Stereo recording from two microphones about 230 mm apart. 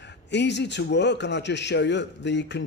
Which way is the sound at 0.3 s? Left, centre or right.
Left.